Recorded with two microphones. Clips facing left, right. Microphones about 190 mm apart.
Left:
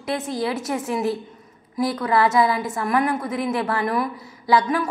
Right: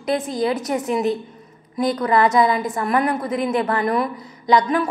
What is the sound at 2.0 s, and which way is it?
A woman's voice, 5° left (ahead or behind).